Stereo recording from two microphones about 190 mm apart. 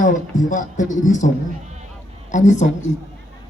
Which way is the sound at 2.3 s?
40° left (ahead or behind).